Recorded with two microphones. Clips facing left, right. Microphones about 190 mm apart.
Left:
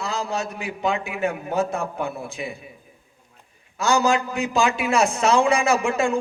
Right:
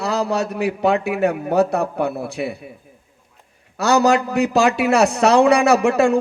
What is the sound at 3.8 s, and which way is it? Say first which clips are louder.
A man's voice: right 5 dB; 65° right (ahead or behind).